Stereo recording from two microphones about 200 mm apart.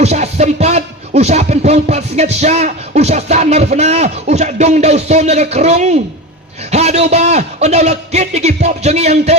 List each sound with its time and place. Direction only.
0.0 s music: 35° right (ahead or behind)